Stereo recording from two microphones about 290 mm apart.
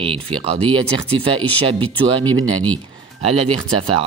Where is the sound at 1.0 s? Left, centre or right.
Centre.